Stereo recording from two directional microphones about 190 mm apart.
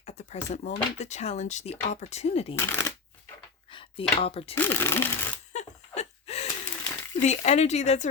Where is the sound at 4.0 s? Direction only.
30° left (ahead or behind).